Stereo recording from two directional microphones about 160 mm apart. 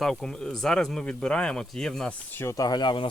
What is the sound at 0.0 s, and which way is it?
Speech, 5° left (ahead or behind).